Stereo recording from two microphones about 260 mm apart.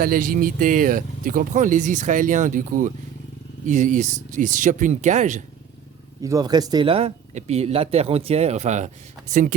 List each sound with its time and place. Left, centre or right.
0.0 s speech: right
6.2 s speech: centre; by 9.6 s right